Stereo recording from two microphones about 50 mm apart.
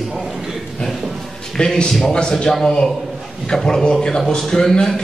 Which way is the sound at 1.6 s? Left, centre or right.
Centre.